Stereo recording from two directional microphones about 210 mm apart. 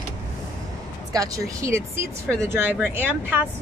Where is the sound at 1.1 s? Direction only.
15° right (ahead or behind).